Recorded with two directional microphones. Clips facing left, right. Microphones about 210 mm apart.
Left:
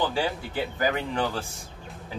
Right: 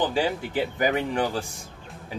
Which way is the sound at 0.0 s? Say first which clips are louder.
Right 2 dB; 20° right (ahead or behind).